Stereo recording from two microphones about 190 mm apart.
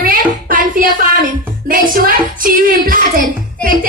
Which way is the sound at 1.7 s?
45° right (ahead or behind).